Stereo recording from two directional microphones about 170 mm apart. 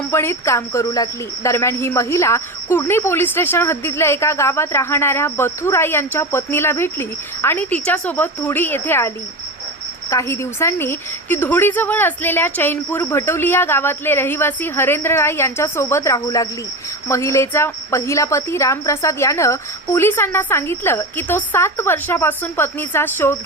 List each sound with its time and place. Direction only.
0.1 s a woman's voice: 15° left (ahead or behind)